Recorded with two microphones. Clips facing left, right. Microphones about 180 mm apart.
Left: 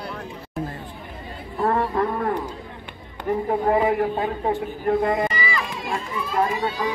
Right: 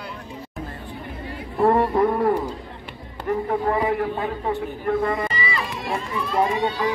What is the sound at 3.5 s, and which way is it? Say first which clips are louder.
Speech: left 4 dB; 25° left (ahead or behind).